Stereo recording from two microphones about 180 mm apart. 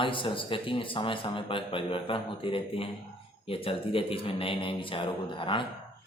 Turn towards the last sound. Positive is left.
turn(degrees=25)  # may be behind; listen again after turning